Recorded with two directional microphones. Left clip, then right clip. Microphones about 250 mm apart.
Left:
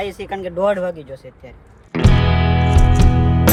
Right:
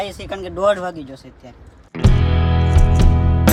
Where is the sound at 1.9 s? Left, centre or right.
Centre.